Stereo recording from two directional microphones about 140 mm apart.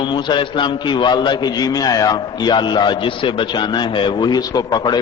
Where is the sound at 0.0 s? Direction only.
35° left (ahead or behind).